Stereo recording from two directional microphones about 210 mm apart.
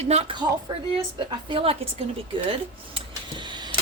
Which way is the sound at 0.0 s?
30° right (ahead or behind).